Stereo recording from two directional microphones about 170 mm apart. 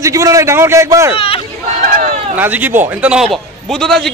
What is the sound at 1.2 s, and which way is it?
Speech, 35° left (ahead or behind).